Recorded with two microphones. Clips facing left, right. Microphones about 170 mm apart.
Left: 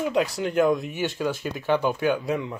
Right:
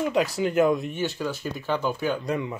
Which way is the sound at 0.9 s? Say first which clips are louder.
Left 2 dB; 10° left (ahead or behind).